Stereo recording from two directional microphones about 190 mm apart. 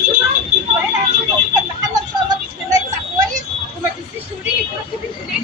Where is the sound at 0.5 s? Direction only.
40° right (ahead or behind).